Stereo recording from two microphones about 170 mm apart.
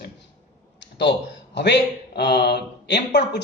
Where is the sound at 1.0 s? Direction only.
90° left.